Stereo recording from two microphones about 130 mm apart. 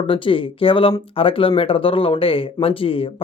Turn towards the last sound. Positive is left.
turn(degrees=45)  # may be behind; listen again after turning